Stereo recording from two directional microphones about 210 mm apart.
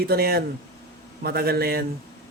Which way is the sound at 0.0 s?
45° right (ahead or behind).